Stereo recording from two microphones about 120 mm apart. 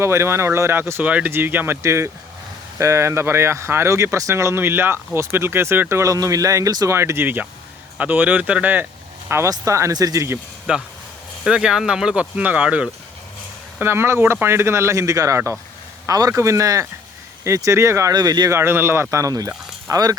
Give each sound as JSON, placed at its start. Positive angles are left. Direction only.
{"t": 0.0, "sound": "speech", "side_deg": -20}
{"t": 9.3, "sound": "speech", "side_deg": -25}
{"t": 10.7, "sound": "speech", "side_deg": -10}
{"t": 13.7, "sound": "speech", "side_deg": -20}